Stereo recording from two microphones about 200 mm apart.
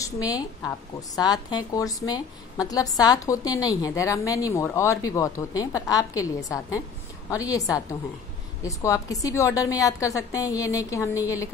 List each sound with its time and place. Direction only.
0.0 s a woman's voice: 20° left (ahead or behind)